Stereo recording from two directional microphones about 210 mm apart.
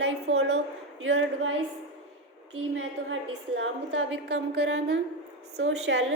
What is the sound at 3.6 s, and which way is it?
A woman's voice, 60° right (ahead or behind).